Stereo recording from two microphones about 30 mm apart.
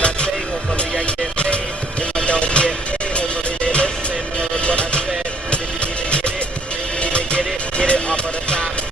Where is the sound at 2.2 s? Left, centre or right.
Left.